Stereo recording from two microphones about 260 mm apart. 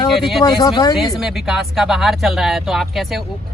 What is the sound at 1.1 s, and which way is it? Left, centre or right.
Speech, centre.